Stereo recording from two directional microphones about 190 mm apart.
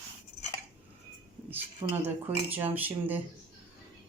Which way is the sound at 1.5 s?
10° right (ahead or behind).